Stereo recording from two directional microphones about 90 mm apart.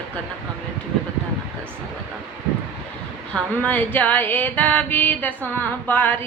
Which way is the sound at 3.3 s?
15° left (ahead or behind).